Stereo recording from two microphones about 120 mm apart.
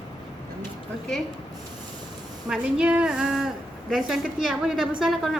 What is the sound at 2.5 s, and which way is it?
A woman's voice, 5° right (ahead or behind).